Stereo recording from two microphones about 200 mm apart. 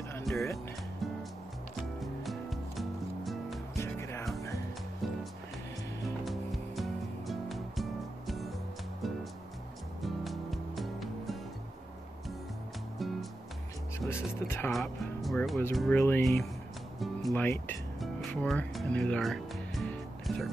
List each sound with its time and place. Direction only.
0.2 s music: centre (ahead or behind)
2.0 s music: centre (ahead or behind)
3.7 s music: 15° left (ahead or behind)
5.0 s music: centre (ahead or behind)
6.2 s music: centre (ahead or behind)
13.0 s music: centre (ahead or behind)
13.9 s speech: 10° left (ahead or behind)
14.7 s speech: centre (ahead or behind)
16.0 s speech: 10° left (ahead or behind)
17.3 s music: 10° left (ahead or behind)